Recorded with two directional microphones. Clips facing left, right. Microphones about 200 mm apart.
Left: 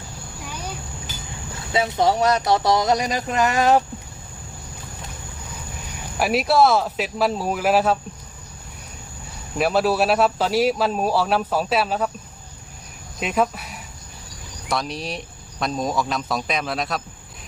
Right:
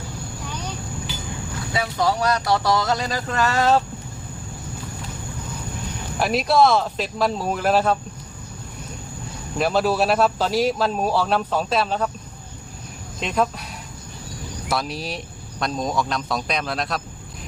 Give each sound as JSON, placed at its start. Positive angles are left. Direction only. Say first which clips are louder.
{"t": 1.7, "sound": "speech", "louder": "left 3 dB", "side_deg": 25}
{"t": 6.1, "sound": "speech", "louder": "even", "side_deg": 5}
{"t": 9.6, "sound": "speech", "louder": "left 1 dB", "side_deg": 5}
{"t": 13.1, "sound": "speech", "louder": "left 1 dB", "side_deg": 5}